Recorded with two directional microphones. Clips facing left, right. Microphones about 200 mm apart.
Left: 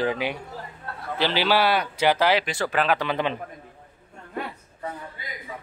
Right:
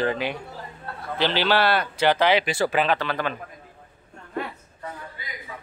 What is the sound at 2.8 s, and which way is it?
Speech, 10° left (ahead or behind).